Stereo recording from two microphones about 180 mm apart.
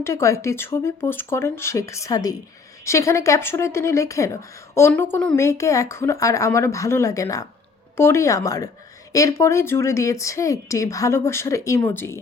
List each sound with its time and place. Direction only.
0.0 s a woman's voice: 15° left (ahead or behind)